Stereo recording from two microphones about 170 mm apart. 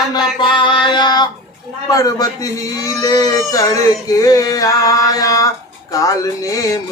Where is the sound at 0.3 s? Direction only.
30° left (ahead or behind).